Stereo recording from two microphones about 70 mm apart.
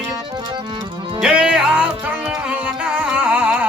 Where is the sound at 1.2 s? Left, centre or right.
Centre.